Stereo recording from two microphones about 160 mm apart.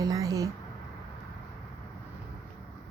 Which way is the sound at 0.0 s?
20° right (ahead or behind).